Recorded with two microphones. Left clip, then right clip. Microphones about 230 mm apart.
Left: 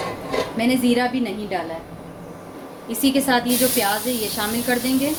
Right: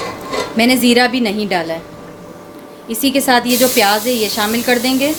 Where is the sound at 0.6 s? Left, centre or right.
Right.